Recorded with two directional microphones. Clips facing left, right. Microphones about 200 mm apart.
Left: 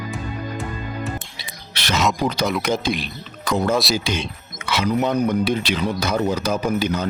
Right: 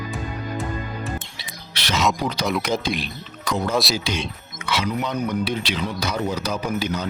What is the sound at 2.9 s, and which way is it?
Speech, centre (ahead or behind).